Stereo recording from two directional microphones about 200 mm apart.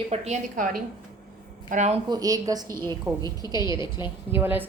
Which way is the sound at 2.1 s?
20° right (ahead or behind).